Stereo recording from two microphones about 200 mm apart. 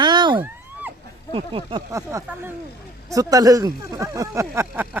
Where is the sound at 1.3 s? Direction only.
25° right (ahead or behind).